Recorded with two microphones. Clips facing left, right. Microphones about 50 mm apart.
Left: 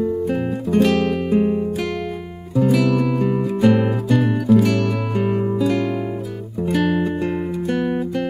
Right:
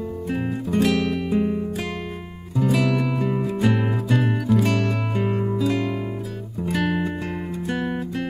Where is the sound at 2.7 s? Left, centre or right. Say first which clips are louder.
Left 3 dB; right.